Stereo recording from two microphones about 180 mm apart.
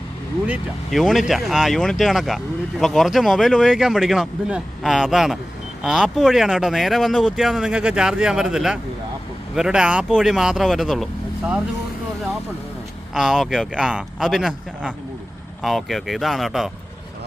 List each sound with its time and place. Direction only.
0.4 s speech: 5° right (ahead or behind)
13.1 s speech: 5° right (ahead or behind)